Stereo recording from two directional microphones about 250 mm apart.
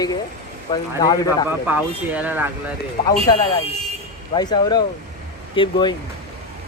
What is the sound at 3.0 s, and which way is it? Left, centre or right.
Speech, centre.